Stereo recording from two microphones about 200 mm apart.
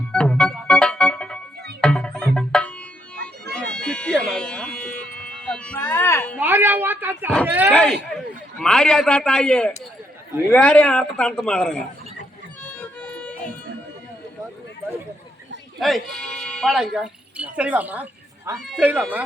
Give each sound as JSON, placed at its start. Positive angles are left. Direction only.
{"t": 0.1, "sound": "music", "side_deg": 5}
{"t": 3.5, "sound": "bagpipes", "side_deg": 5}
{"t": 4.2, "sound": "a sound", "side_deg": 5}
{"t": 6.4, "sound": "a woman's voice", "side_deg": -10}
{"t": 7.7, "sound": "a man's voice", "side_deg": 5}
{"t": 13.0, "sound": "a sound", "side_deg": 5}
{"t": 15.8, "sound": "a woman's voice", "side_deg": 0}